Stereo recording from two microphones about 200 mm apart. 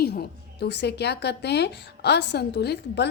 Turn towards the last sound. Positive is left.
turn(degrees=55)  # may be behind; listen again after turning